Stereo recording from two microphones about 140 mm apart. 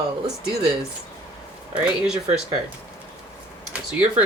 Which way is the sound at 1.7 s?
10° right (ahead or behind).